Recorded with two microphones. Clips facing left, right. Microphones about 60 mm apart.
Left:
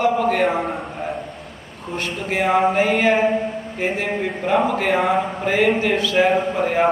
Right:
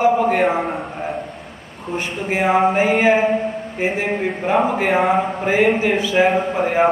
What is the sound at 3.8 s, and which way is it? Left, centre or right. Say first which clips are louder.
A man's voice: right 2 dB; centre.